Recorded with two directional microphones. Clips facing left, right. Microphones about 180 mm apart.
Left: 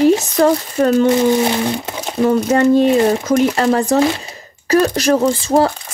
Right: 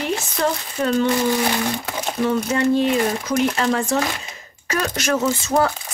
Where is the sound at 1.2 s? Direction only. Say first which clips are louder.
Left 6 dB; 25° left (ahead or behind).